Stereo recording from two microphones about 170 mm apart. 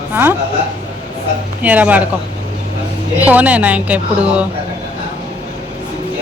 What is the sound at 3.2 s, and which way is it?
A woman's voice, 10° right (ahead or behind).